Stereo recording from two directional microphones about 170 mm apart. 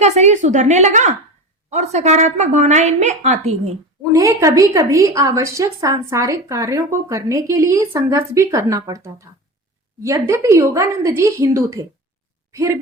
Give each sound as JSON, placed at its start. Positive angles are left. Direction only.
{"t": 0.0, "sound": "a woman's voice", "side_deg": -40}
{"t": 4.1, "sound": "a woman's voice", "side_deg": -20}